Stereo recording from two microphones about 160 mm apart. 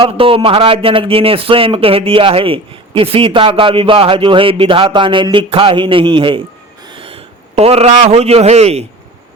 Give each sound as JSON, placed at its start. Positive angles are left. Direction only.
{"t": 0.0, "sound": "a man's voice", "side_deg": -35}